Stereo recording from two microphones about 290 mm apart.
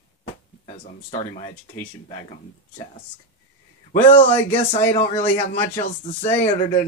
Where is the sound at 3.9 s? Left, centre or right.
Centre.